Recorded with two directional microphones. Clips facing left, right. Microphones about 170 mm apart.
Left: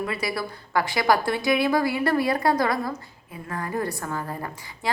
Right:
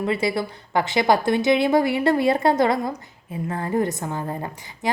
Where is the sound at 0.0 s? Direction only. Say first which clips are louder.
Right 5 dB; 25° right (ahead or behind).